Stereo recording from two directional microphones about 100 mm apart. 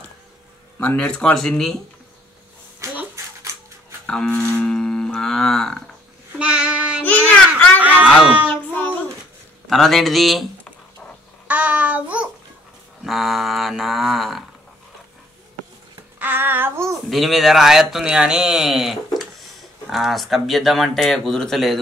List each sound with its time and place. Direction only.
0.7 s livestock: 15° left (ahead or behind)
2.8 s a sound: 30° right (ahead or behind)
4.0 s livestock: 5° left (ahead or behind)
6.3 s child singing: 10° right (ahead or behind)
7.2 s a sound: 15° left (ahead or behind)
9.7 s speech: centre (ahead or behind)
11.4 s child singing: 15° right (ahead or behind)
13.0 s speech: centre (ahead or behind)
16.2 s child singing: 20° right (ahead or behind)
17.1 s speech: centre (ahead or behind)